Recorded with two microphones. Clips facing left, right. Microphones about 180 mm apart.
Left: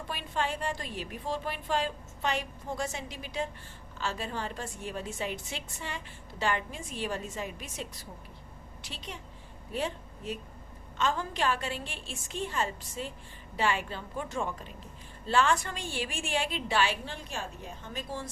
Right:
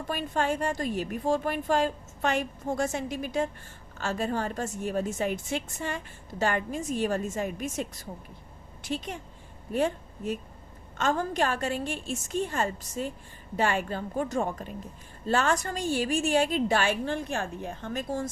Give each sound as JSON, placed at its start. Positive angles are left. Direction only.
{"t": 0.1, "sound": "a woman's voice", "side_deg": -45}